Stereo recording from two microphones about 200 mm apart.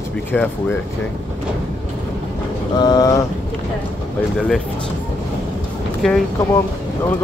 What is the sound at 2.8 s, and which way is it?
Speech, 20° left (ahead or behind).